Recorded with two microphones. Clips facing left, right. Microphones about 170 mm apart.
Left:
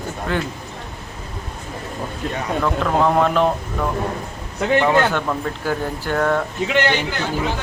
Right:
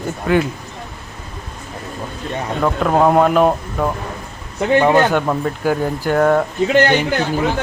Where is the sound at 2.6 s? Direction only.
40° right (ahead or behind).